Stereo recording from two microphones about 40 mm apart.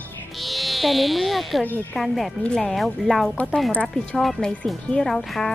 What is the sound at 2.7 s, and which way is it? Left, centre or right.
Speech, centre.